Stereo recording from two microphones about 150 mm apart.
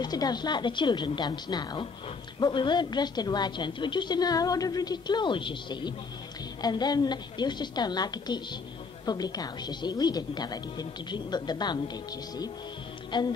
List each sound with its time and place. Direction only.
0.0 s a woman's voice: 25° left (ahead or behind)